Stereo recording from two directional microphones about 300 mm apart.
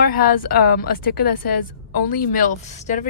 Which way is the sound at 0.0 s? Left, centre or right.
Left.